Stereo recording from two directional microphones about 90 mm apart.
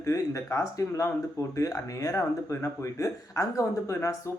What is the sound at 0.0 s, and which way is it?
Speech, 35° left (ahead or behind).